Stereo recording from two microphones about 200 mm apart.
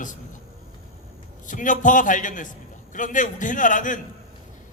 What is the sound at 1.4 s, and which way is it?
A man's voice, 40° left (ahead or behind).